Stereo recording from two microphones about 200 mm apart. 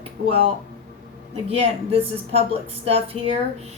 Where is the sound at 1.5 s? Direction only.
30° right (ahead or behind).